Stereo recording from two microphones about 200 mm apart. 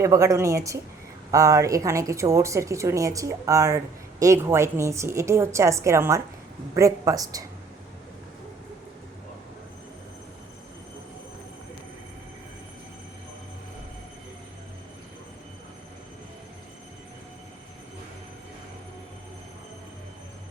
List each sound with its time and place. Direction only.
0.0 s a woman's voice: 15° right (ahead or behind)